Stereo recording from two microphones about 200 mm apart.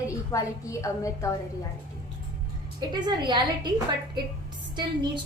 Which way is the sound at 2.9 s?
20° right (ahead or behind).